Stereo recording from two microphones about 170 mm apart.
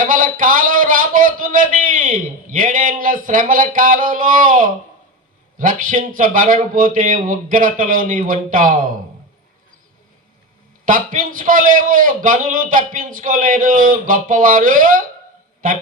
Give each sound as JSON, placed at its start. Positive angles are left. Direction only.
{"t": 0.0, "sound": "a man's voice", "side_deg": -50}
{"t": 10.8, "sound": "a man's voice", "side_deg": -50}